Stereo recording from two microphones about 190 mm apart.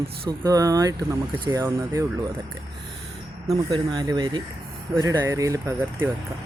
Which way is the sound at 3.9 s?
20° right (ahead or behind).